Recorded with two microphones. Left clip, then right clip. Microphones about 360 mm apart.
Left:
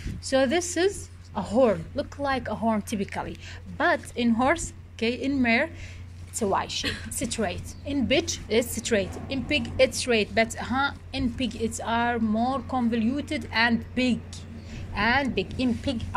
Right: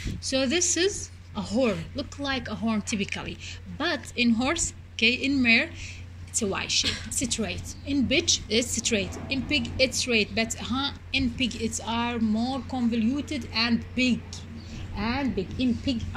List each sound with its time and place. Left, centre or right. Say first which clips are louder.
0.2 s a woman's voice: left 2 dB; left